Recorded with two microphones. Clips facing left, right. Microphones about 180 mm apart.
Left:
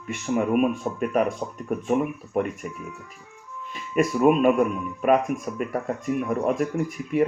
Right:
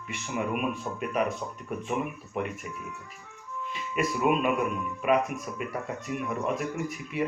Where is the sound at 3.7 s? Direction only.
45° left (ahead or behind).